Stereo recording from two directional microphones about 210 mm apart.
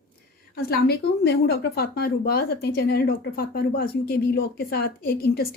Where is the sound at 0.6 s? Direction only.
50° left (ahead or behind).